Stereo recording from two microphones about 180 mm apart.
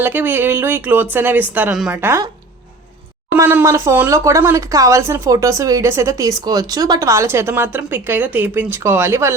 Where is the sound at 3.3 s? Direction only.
15° right (ahead or behind).